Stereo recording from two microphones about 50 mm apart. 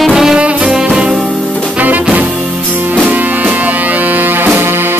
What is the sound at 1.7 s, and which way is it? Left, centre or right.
Music, right.